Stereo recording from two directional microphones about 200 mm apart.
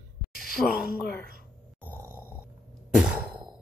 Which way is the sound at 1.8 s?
10° left (ahead or behind).